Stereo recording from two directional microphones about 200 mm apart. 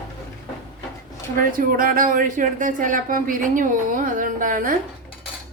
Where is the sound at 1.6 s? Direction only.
45° right (ahead or behind).